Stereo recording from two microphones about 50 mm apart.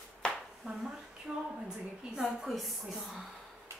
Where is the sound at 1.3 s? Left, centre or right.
Centre.